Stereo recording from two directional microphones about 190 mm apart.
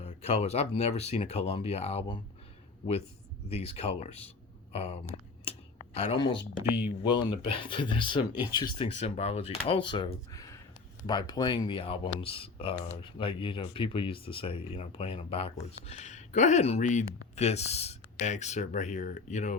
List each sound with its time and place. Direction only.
0.0 s speech: 35° left (ahead or behind)
3.5 s speech: 30° left (ahead or behind)
5.5 s a sound: 30° left (ahead or behind)
7.2 s speech: 25° left (ahead or behind)
9.0 s speech: 35° left (ahead or behind)